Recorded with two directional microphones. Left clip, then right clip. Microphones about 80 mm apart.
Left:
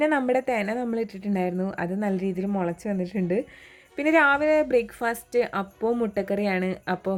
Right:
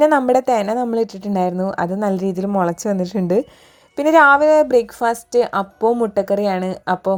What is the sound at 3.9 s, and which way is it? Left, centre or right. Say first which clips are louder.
A woman's voice: right 9 dB; centre.